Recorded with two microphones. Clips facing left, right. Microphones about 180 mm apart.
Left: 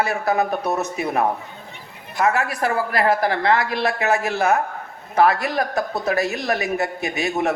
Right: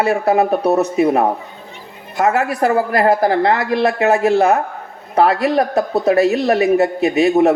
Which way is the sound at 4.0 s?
30° right (ahead or behind).